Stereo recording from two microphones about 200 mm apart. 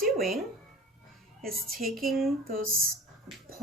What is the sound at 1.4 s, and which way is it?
Speech, 45° right (ahead or behind).